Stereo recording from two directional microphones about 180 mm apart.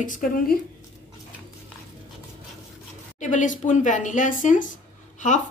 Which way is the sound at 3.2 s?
45° left (ahead or behind).